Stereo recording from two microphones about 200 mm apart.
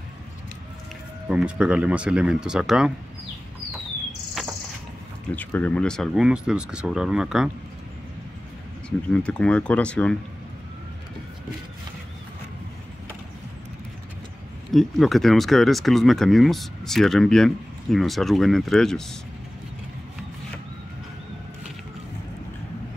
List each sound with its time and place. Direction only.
1.3 s speech: 5° right (ahead or behind)
4.4 s insect: centre (ahead or behind)
5.3 s speech: 10° left (ahead or behind)
9.1 s speech: 5° left (ahead or behind)
14.7 s speech: centre (ahead or behind)